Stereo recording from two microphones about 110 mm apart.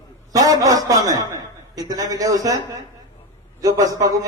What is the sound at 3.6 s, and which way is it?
Speech, 35° right (ahead or behind).